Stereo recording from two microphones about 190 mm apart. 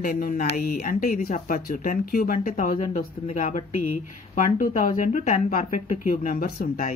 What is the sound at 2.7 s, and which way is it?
Speech, 35° left (ahead or behind).